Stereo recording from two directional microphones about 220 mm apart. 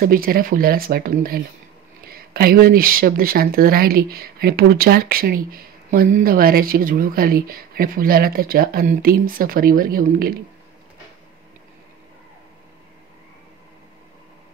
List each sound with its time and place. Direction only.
0.0 s speech: 40° right (ahead or behind)